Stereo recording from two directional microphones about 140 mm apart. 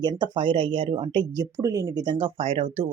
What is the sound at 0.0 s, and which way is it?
Speech, 35° right (ahead or behind).